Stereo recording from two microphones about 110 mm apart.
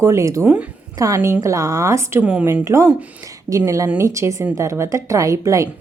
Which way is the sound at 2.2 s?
10° right (ahead or behind).